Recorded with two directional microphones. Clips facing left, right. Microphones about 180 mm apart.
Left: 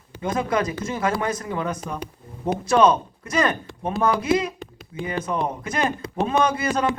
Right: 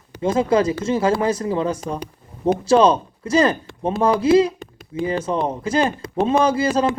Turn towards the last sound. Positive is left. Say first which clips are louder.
# right 4 dB
turn(degrees=-30)  # may be behind; listen again after turning